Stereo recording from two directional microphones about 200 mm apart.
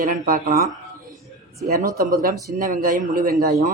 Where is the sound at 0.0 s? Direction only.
45° right (ahead or behind).